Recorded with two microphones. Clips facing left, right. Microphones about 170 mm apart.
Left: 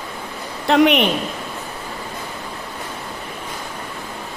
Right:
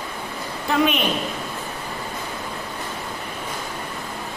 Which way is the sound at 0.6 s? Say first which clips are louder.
Left 6 dB; 70° left (ahead or behind).